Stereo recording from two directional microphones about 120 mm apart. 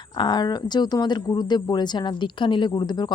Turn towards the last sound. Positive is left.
turn(degrees=35)  # may be behind; listen again after turning